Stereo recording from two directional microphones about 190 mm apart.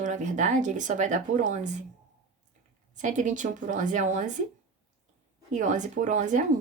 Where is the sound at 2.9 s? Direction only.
40° right (ahead or behind).